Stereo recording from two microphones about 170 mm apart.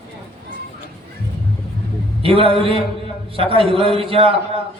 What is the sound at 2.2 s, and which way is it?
A man's voice, 35° right (ahead or behind).